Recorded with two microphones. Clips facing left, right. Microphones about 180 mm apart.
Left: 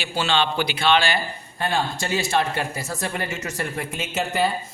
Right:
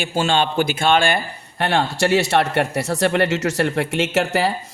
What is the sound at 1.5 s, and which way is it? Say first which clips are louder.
A woman's voice: right 5 dB; 75° right (ahead or behind).